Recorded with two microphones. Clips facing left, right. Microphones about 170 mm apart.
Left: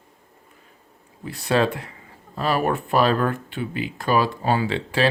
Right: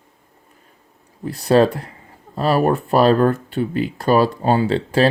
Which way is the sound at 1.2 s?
40° right (ahead or behind).